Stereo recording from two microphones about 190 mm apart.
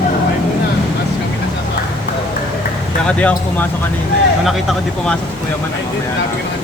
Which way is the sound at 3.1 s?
5° left (ahead or behind).